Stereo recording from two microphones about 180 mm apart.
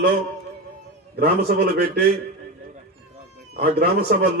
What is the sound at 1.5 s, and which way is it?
Speech, 55° right (ahead or behind).